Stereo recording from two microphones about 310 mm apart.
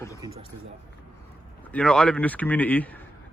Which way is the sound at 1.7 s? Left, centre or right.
Centre.